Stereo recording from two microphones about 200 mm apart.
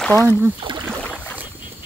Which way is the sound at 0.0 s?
10° left (ahead or behind).